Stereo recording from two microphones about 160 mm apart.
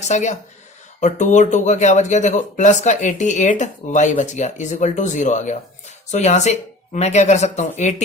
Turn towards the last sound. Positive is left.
turn(degrees=45)  # may be behind; listen again after turning